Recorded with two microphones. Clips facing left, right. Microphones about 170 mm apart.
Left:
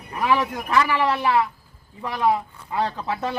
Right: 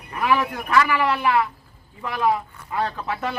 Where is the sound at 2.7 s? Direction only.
25° left (ahead or behind).